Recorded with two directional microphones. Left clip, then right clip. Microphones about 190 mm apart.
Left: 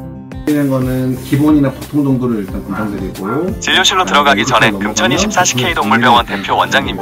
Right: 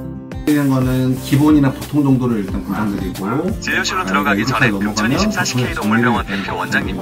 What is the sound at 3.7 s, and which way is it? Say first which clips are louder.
Speech: left 8 dB; 40° left (ahead or behind).